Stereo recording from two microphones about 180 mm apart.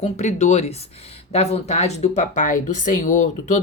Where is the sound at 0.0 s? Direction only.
40° left (ahead or behind).